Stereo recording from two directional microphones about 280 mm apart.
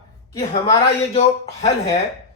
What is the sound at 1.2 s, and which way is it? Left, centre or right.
Speech, left.